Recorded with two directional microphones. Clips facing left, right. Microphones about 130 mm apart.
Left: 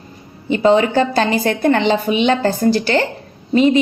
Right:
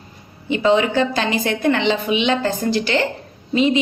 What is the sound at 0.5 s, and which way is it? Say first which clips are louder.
A woman's voice: left 3 dB; 40° left (ahead or behind).